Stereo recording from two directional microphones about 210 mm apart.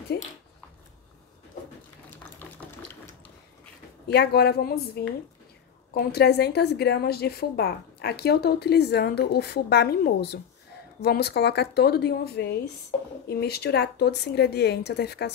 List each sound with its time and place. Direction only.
0.1 s a woman's voice: 50° left (ahead or behind)
2.4 s a sound: 5° left (ahead or behind)
4.1 s a woman's voice: 50° left (ahead or behind)
12.9 s speech: 30° left (ahead or behind)
13.3 s a woman's voice: 50° left (ahead or behind)